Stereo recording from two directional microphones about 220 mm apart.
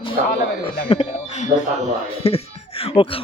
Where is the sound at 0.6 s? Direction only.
25° left (ahead or behind).